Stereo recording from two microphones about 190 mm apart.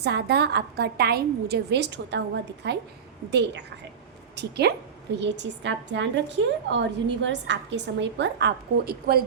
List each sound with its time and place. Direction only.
0.0 s a woman's voice: 60° right (ahead or behind)